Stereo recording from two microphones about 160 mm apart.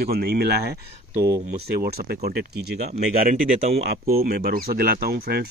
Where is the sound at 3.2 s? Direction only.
60° right (ahead or behind).